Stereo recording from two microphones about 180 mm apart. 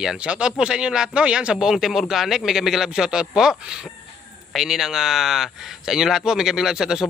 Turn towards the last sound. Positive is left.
turn(degrees=-5)  # may be behind; listen again after turning